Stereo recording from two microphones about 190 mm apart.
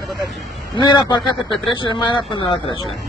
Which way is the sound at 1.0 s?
25° left (ahead or behind).